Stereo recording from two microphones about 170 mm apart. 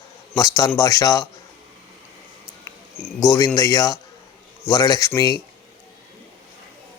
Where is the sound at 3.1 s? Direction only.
20° left (ahead or behind).